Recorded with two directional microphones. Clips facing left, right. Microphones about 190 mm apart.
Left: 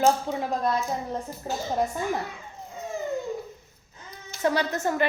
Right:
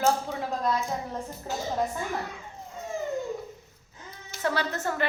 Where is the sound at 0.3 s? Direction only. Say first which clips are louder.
Left 4 dB; 20° left (ahead or behind).